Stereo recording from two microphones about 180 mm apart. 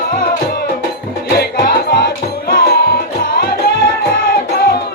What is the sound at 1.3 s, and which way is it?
Music, 60° left (ahead or behind).